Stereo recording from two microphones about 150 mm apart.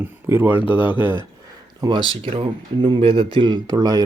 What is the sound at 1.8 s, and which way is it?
Speech, 30° right (ahead or behind).